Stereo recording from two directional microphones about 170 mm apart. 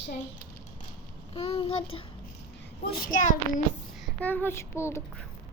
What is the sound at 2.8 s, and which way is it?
Speech, 60° left (ahead or behind).